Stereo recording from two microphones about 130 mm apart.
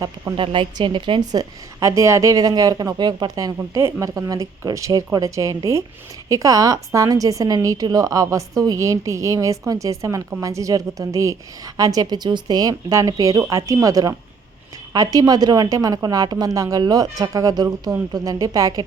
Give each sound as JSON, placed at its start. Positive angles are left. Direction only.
{"t": 0.3, "sound": "a woman's voice", "side_deg": -40}